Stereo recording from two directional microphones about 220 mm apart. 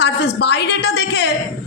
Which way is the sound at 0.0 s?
50° left (ahead or behind).